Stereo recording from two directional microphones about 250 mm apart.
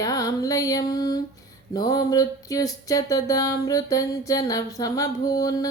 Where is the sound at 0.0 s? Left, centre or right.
Centre.